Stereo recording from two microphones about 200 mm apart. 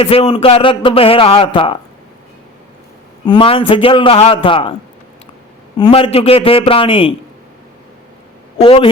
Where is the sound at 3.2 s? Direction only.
25° left (ahead or behind).